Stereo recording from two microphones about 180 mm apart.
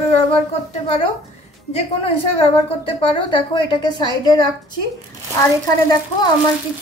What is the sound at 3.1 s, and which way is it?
Speech, 25° left (ahead or behind).